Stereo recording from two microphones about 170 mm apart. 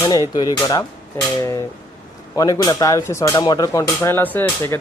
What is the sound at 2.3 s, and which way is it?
Speech, 20° left (ahead or behind).